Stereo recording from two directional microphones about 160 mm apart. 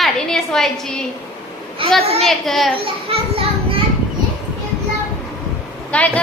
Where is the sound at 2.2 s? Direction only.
Centre (ahead or behind).